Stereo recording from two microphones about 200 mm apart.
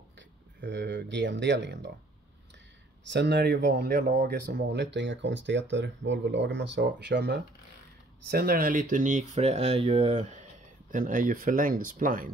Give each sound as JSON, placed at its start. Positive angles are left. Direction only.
{"t": 0.6, "sound": "speech", "side_deg": -60}
{"t": 3.1, "sound": "speech", "side_deg": -60}